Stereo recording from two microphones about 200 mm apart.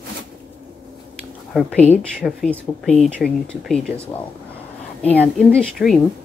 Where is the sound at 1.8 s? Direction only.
35° left (ahead or behind).